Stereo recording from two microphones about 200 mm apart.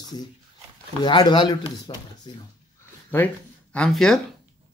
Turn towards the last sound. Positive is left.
turn(degrees=0)  # may be behind; listen again after turning